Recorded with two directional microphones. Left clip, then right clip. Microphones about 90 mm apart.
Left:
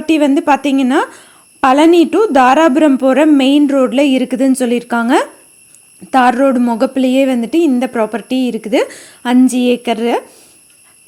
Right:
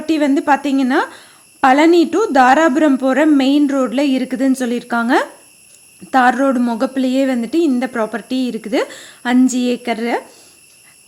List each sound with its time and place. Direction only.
0.0 s a woman's voice: 40° left (ahead or behind)